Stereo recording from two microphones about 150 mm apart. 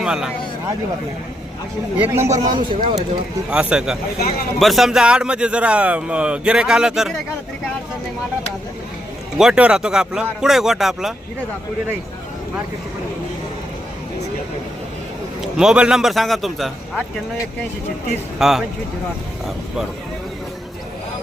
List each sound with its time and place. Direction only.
0.0 s speech: 5° right (ahead or behind)
2.0 s speech: 20° right (ahead or behind)
2.5 s speech: 30° right (ahead or behind)
3.5 s a man's voice: 5° right (ahead or behind)
9.4 s a man's voice: 5° right (ahead or behind)
15.4 s a man's voice: 5° right (ahead or behind)
18.3 s a man's voice: centre (ahead or behind)